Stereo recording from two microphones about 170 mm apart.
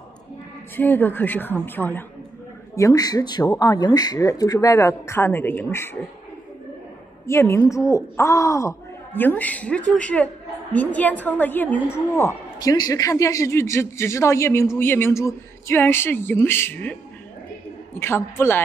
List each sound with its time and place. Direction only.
0.7 s speech: 10° left (ahead or behind)
7.2 s speech: 15° left (ahead or behind)
17.9 s speech: 15° left (ahead or behind)